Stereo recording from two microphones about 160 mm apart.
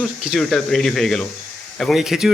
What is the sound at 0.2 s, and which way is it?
Speech, centre (ahead or behind).